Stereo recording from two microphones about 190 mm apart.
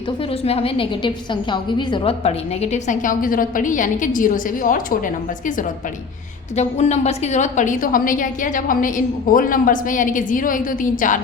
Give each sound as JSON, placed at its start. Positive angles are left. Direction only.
{"t": 0.4, "sound": "a woman's voice", "side_deg": 30}
{"t": 6.6, "sound": "a woman's voice", "side_deg": 35}